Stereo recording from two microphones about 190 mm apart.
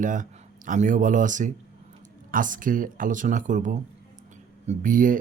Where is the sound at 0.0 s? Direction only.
45° right (ahead or behind).